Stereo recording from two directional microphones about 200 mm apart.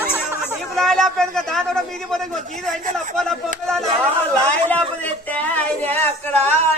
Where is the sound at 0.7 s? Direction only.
Centre (ahead or behind).